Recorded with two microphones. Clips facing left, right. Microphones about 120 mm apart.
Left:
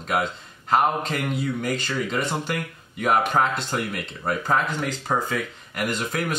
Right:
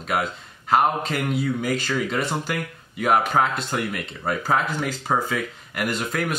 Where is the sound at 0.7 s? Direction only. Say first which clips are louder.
Right 1 dB; centre (ahead or behind).